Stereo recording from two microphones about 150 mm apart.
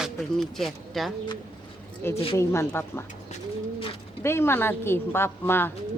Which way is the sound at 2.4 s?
20° left (ahead or behind).